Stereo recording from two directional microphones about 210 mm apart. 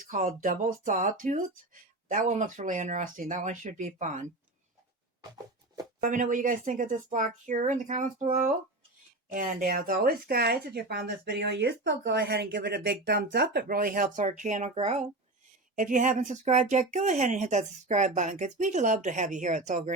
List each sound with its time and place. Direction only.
0.1 s speech: 35° right (ahead or behind)
6.0 s speech: 40° right (ahead or behind)